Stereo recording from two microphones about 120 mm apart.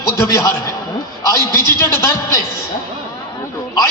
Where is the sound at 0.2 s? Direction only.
30° left (ahead or behind).